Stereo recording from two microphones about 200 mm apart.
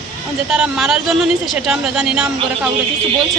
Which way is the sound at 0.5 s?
5° right (ahead or behind).